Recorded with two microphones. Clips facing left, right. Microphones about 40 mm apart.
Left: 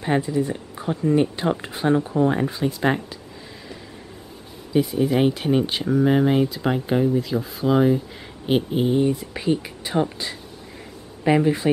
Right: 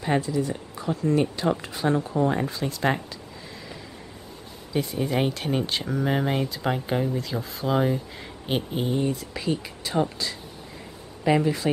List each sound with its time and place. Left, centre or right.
0.0 s speech: left
4.7 s speech: centre
9.1 s speech: left
11.2 s speech: centre